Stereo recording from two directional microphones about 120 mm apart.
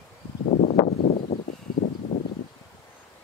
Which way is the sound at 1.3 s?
60° left (ahead or behind).